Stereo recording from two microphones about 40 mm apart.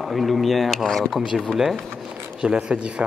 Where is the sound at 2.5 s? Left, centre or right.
Right.